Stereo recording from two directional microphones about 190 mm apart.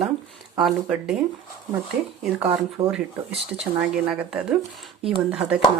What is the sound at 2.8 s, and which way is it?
Speech, 30° right (ahead or behind).